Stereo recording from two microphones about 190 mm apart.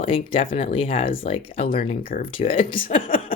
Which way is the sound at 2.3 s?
30° left (ahead or behind).